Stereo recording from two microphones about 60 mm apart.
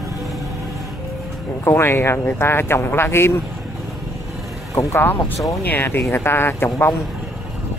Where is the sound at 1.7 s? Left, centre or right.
Left.